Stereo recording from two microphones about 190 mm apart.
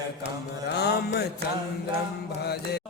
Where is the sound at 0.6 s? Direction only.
60° left (ahead or behind).